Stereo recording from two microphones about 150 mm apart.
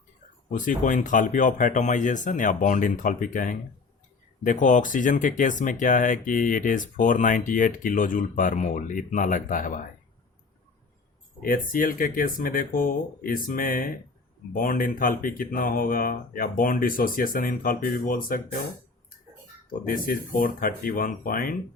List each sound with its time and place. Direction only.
0.5 s speech: 60° left (ahead or behind)
11.4 s speech: 65° left (ahead or behind)
20.1 s speech: 70° left (ahead or behind)